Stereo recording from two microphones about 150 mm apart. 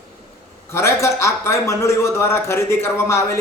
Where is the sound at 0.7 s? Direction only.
20° left (ahead or behind).